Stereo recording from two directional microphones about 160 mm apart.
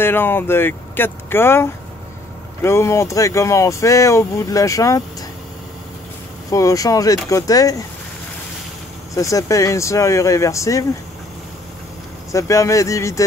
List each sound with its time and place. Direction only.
0.0 s speech: 15° left (ahead or behind)
6.5 s speech: 20° left (ahead or behind)
9.1 s speech: 20° left (ahead or behind)
12.3 s speech: 20° left (ahead or behind)